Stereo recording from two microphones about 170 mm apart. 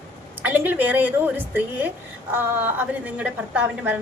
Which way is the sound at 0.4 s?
10° right (ahead or behind).